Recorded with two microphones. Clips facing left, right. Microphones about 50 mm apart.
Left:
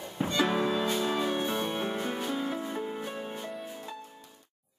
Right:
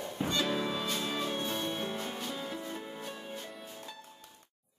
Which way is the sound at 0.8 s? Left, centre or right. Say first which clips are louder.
Left 6 dB; centre.